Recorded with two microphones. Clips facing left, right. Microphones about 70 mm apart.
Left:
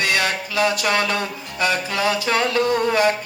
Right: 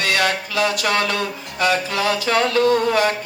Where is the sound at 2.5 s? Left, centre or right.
Left.